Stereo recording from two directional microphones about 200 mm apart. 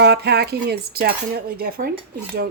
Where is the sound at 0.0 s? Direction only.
55° right (ahead or behind).